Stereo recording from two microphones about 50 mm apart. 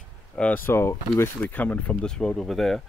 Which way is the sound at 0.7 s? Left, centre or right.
Left.